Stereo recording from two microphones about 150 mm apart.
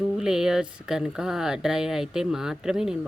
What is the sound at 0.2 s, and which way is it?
Speech, 5° right (ahead or behind).